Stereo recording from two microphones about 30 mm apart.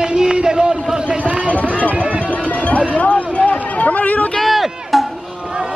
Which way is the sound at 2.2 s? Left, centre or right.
Left.